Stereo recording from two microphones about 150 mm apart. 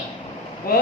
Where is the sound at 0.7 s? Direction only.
80° left.